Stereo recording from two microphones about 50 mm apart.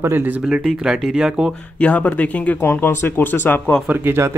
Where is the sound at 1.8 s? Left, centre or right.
Left.